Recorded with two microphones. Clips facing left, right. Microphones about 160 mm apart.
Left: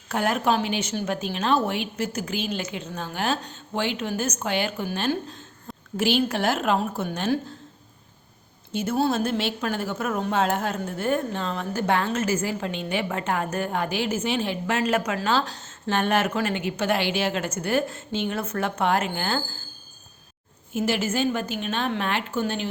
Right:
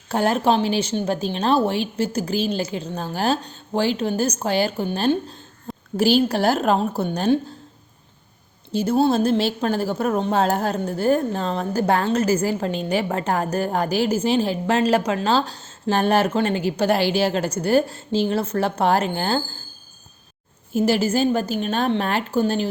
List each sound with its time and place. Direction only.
0.1 s a woman's voice: 30° right (ahead or behind)
8.7 s a woman's voice: 30° right (ahead or behind)
20.7 s a woman's voice: 35° right (ahead or behind)